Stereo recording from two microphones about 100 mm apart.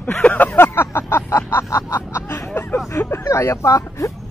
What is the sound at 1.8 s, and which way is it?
Snicker, 30° left (ahead or behind).